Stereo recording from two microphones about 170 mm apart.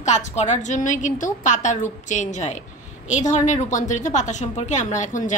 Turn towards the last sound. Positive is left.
turn(degrees=45)  # may be behind; listen again after turning